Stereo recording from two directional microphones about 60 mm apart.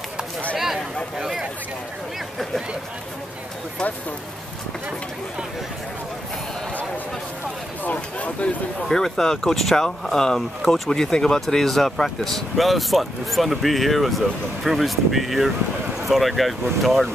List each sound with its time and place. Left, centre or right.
1.1 s a sound: centre
7.8 s speech: left
8.8 s speech: centre